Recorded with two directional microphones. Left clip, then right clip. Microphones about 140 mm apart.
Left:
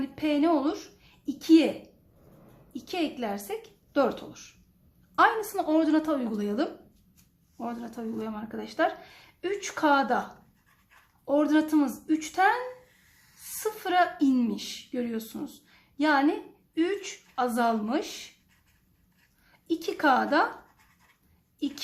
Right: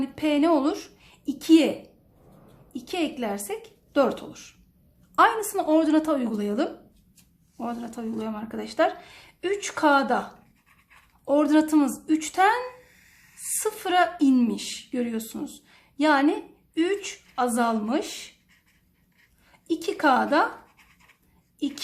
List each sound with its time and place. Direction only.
0.0 s a woman's voice: 20° right (ahead or behind)
2.7 s a woman's voice: 15° right (ahead or behind)
11.3 s a woman's voice: 20° right (ahead or behind)
13.6 s a woman's voice: 20° right (ahead or behind)
19.5 s speech: 15° right (ahead or behind)